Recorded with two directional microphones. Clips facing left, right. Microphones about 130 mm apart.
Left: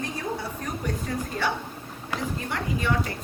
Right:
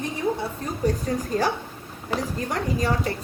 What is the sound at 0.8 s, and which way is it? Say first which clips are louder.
Speech: right 9 dB; 35° right (ahead or behind).